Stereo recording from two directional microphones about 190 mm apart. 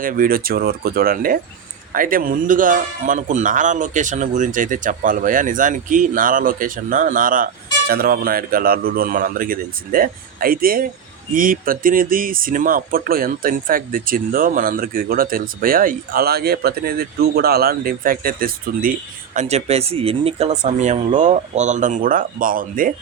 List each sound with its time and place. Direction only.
0.0 s speech: 50° right (ahead or behind)